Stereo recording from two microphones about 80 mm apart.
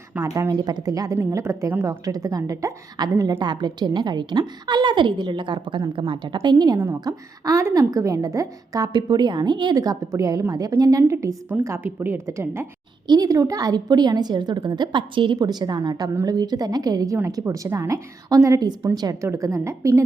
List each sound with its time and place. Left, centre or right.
0.2 s a woman's voice: right
3.3 s a woman's voice: right
6.1 s a woman's voice: right
6.7 s a woman's voice: right
8.9 s a woman's voice: right
9.7 s a woman's voice: right
11.8 s a woman's voice: right
13.1 s a woman's voice: right